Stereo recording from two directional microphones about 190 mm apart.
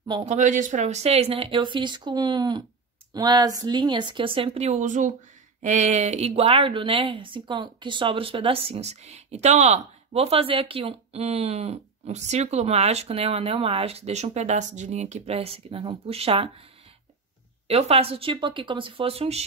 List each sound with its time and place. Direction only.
0.2 s speech: 40° right (ahead or behind)
17.6 s speech: 30° right (ahead or behind)